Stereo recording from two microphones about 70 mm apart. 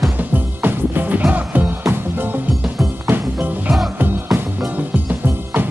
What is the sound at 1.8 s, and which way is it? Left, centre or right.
Music, right.